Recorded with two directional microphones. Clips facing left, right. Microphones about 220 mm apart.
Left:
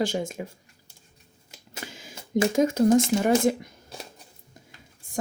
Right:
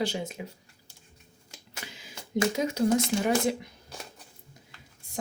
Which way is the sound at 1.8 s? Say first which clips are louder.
Left 4 dB; 45° left (ahead or behind).